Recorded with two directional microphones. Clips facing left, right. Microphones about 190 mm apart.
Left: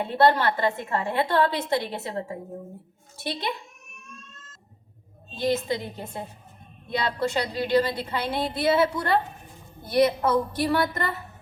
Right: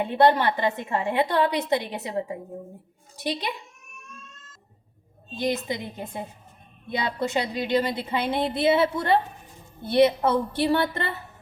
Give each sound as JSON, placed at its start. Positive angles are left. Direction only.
{"t": 0.0, "sound": "a woman's voice", "side_deg": -15}
{"t": 5.4, "sound": "a woman's voice", "side_deg": -15}